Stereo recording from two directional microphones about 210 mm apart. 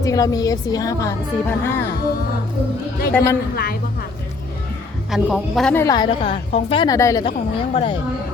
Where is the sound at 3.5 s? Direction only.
45° left (ahead or behind).